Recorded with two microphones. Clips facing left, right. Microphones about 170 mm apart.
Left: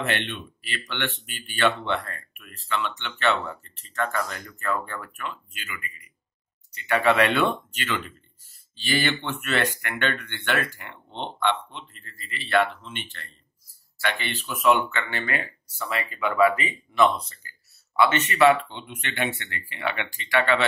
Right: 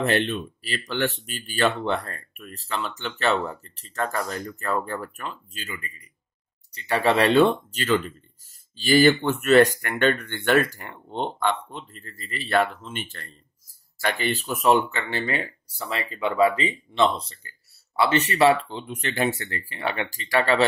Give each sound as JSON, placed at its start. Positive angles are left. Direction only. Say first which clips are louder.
{"t": 0.0, "sound": "speech", "louder": "right 6 dB", "side_deg": -40}